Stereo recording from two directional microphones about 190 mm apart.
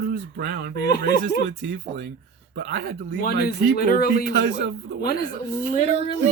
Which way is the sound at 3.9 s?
50° left (ahead or behind).